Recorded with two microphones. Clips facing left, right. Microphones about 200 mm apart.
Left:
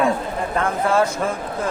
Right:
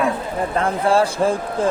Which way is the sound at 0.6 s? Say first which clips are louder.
Right 2 dB; 30° right (ahead or behind).